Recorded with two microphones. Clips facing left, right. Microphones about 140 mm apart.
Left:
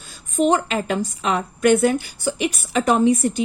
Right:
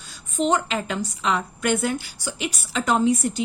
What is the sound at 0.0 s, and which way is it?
A woman's voice, 45° left (ahead or behind).